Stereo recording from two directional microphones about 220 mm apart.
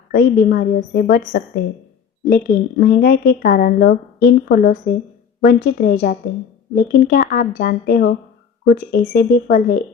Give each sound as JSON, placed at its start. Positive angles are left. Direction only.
{"t": 0.1, "sound": "a woman's voice", "side_deg": 40}
{"t": 2.2, "sound": "speech", "side_deg": 40}